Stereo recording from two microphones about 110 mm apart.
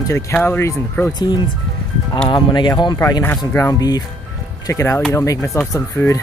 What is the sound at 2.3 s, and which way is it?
Speech, 45° left (ahead or behind).